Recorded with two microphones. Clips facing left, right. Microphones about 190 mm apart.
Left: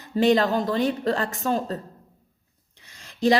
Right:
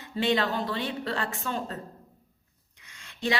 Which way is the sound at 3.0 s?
35° left (ahead or behind).